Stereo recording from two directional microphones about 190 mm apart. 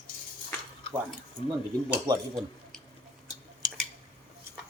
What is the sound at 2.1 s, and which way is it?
Speech, 20° right (ahead or behind).